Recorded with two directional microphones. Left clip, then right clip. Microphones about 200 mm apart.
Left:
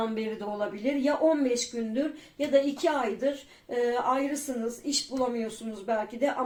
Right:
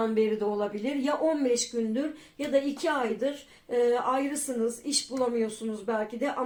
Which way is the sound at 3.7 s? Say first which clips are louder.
Right 1 dB; 25° right (ahead or behind).